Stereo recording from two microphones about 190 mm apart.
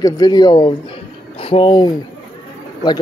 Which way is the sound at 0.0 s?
20° left (ahead or behind).